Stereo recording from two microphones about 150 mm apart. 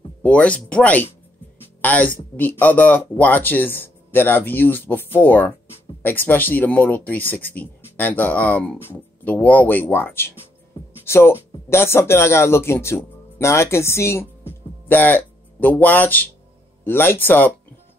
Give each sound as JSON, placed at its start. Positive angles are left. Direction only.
{"t": 0.2, "sound": "speech", "side_deg": 10}